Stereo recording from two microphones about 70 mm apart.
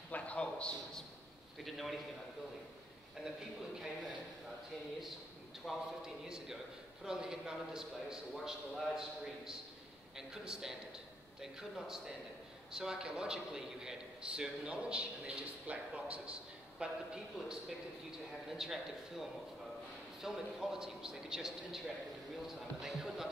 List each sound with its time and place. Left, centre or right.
0.1 s a sound: centre
1.6 s a man's voice: centre
5.7 s a man's voice: centre